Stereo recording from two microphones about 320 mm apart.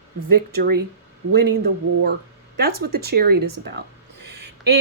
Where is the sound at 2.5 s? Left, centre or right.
Right.